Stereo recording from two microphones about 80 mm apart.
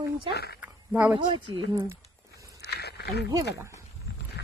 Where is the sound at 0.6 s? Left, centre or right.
Centre.